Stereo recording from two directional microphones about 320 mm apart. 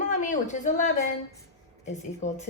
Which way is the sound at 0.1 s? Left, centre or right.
Left.